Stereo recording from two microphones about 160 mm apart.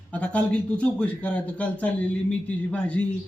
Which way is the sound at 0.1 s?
10° left (ahead or behind).